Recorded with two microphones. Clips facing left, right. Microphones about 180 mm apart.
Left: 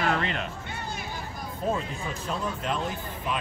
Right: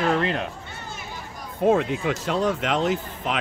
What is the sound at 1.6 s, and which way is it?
Speech, 75° right (ahead or behind).